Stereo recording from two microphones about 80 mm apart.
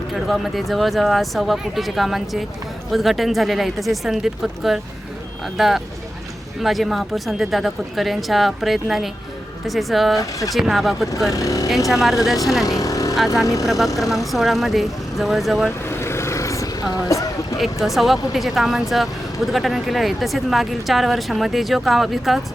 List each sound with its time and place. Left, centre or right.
0.1 s speech: centre
10.2 s speech: left
10.5 s speech: centre
11.3 s speech: left
12.0 s speech: centre
12.6 s vehicle: left
13.1 s speech: centre
13.4 s speech: left
13.7 s speech: centre
15.9 s vehicle: left
17.6 s speech: centre